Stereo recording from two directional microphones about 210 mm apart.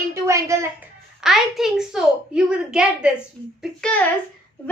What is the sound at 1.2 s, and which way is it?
A woman's voice, centre (ahead or behind).